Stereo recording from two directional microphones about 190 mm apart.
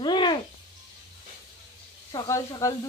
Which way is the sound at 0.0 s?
25° left (ahead or behind).